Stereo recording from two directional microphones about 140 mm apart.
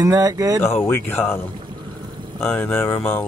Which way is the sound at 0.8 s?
15° left (ahead or behind).